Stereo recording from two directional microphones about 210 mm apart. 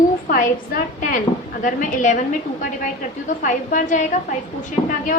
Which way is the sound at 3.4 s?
40° left (ahead or behind).